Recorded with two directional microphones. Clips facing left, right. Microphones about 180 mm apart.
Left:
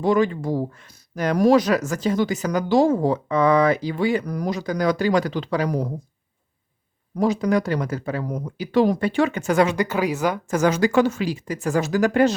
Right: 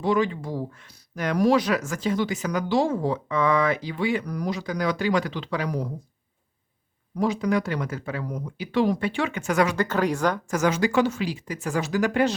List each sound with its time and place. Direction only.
0.0 s speech: 45° left (ahead or behind)
7.2 s speech: 40° left (ahead or behind)
9.7 s speech: 10° left (ahead or behind)
10.5 s speech: 35° left (ahead or behind)